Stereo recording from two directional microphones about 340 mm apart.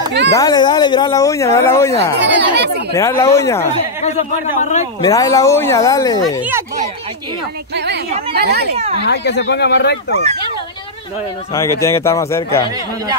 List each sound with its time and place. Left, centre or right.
0.3 s speech: centre
2.1 s speech: right
2.9 s speech: centre
4.0 s a man's voice: centre
7.7 s a sound: right
8.4 s speech: right
9.0 s speech: left
11.8 s speech: centre